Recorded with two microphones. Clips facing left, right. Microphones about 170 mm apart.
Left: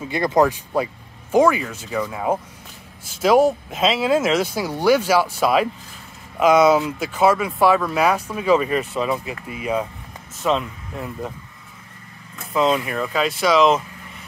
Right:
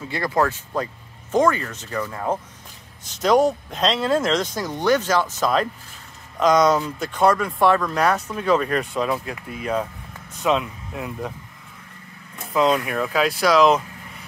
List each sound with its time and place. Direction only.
0.0 s speech: 20° left (ahead or behind); by 11.3 s centre (ahead or behind)
12.5 s speech: centre (ahead or behind)